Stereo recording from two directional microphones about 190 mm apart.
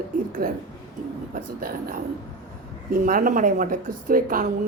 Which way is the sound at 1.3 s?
50° right (ahead or behind).